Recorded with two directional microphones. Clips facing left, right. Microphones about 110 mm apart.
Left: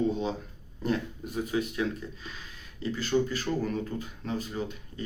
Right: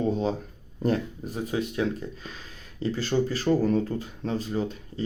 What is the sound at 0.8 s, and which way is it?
Speech, 40° right (ahead or behind).